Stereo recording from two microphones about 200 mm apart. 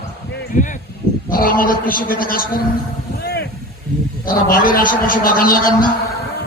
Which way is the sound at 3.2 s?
55° left (ahead or behind).